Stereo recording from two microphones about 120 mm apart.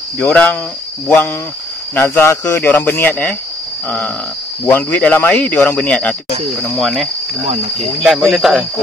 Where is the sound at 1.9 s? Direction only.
20° left (ahead or behind).